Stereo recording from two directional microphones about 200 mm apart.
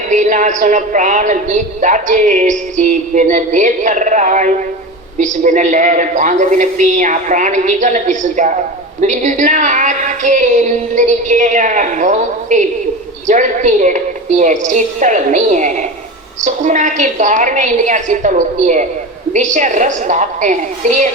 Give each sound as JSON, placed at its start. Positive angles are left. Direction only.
{"t": 0.1, "sound": "a woman's voice", "side_deg": -40}